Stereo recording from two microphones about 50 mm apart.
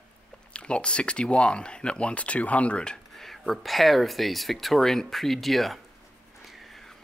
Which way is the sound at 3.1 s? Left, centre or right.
Centre.